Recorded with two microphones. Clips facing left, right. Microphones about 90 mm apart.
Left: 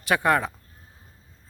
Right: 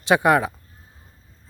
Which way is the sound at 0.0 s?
20° right (ahead or behind).